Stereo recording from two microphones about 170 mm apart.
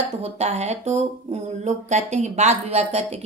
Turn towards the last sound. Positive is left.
turn(degrees=-40)  # may be behind; listen again after turning